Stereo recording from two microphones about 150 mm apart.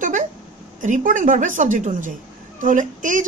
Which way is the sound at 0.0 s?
55° right (ahead or behind).